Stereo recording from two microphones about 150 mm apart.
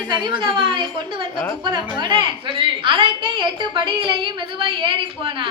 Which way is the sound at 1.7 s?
30° right (ahead or behind).